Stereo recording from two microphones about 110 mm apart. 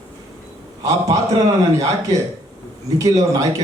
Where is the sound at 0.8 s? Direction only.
30° right (ahead or behind).